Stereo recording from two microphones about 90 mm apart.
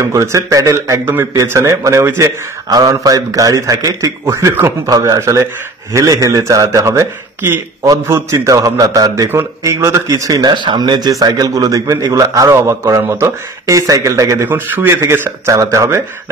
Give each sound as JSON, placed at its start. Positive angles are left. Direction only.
{"t": 0.0, "sound": "a man's voice", "side_deg": -35}
{"t": 4.3, "sound": "a man's voice", "side_deg": -30}
{"t": 4.8, "sound": "a man's voice", "side_deg": -40}
{"t": 10.5, "sound": "a man's voice", "side_deg": -60}
{"t": 14.4, "sound": "a man's voice", "side_deg": -20}